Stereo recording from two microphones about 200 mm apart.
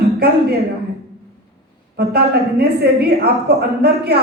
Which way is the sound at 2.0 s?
55° right (ahead or behind).